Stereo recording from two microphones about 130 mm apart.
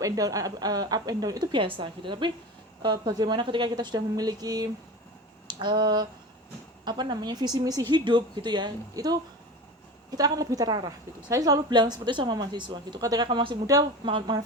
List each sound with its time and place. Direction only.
0.0 s a woman's voice: 25° right (ahead or behind)
10.2 s a woman's voice: 30° right (ahead or behind)